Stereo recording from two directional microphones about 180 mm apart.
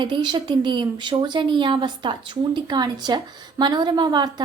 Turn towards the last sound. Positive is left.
turn(degrees=-25)  # may be behind; listen again after turning